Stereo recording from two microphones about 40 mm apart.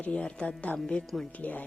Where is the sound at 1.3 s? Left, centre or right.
Left.